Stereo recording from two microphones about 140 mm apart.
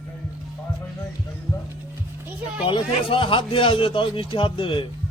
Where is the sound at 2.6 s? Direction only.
40° left (ahead or behind).